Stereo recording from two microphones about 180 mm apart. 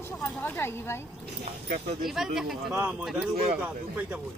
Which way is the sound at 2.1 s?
Centre (ahead or behind).